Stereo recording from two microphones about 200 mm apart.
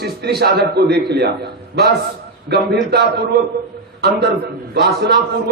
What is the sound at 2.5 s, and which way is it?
Speech, 55° right (ahead or behind).